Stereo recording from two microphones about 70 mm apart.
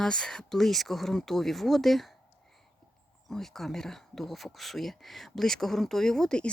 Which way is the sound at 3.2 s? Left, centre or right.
Centre.